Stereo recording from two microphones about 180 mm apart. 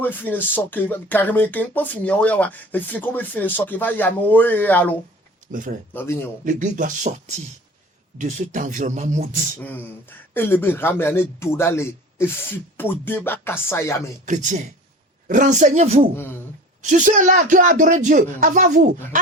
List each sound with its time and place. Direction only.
0.0 s speech: 10° left (ahead or behind)
5.5 s speech: 45° right (ahead or behind)
5.9 s speech: 10° left (ahead or behind)
6.4 s speech: 45° right (ahead or behind)
9.6 s speech: 10° left (ahead or behind)
14.3 s speech: 45° right (ahead or behind)
16.1 s speech: 10° left (ahead or behind)
16.8 s speech: 45° right (ahead or behind)